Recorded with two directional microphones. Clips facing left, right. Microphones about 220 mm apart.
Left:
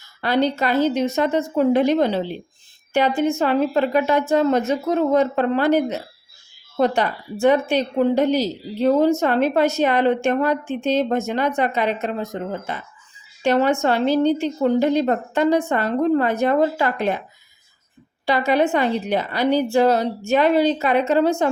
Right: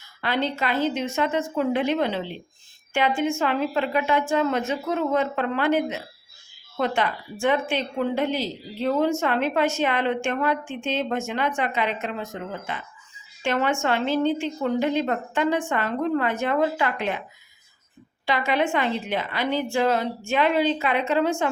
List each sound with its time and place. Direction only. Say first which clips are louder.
0.2 s speech: left 6 dB; 40° left (ahead or behind)
18.3 s speech: left 5 dB; 40° left (ahead or behind)